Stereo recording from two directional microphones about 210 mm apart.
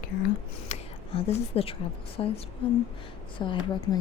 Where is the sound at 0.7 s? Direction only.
30° left (ahead or behind).